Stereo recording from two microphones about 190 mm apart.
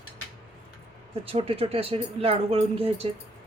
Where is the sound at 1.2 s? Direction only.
30° right (ahead or behind).